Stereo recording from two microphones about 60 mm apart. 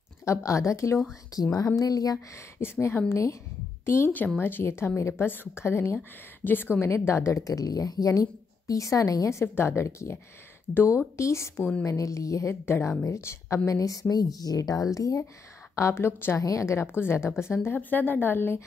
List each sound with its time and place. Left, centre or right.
0.2 s a woman's voice: left
1.3 s a woman's voice: left
1.8 s speech: left
2.3 s a woman's voice: left
3.1 s a woman's voice: left
4.4 s a woman's voice: left
5.2 s a woman's voice: left
6.9 s a woman's voice: left
12.0 s a woman's voice: left
12.4 s a woman's voice: left
15.7 s a woman's voice: left
16.3 s a woman's voice: left
17.7 s a woman's voice: left